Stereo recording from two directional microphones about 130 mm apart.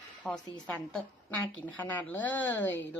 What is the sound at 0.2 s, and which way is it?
A woman's voice, 10° left (ahead or behind).